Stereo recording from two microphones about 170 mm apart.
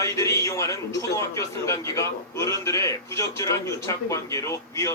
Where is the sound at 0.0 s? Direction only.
20° left (ahead or behind).